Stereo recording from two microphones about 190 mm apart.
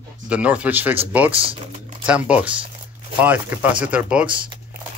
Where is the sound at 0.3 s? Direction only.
5° right (ahead or behind).